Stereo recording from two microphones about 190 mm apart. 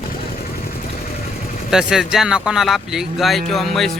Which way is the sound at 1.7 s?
5° right (ahead or behind).